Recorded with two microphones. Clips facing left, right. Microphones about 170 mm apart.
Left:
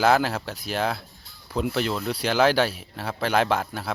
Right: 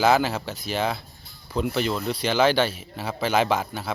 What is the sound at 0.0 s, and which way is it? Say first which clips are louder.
Speech: even; centre (ahead or behind).